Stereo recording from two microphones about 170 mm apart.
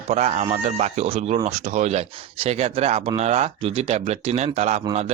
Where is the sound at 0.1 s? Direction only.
40° right (ahead or behind).